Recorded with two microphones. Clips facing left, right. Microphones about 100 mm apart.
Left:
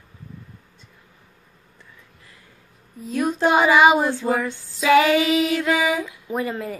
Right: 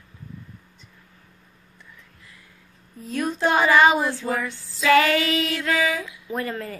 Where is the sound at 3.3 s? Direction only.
15° left (ahead or behind).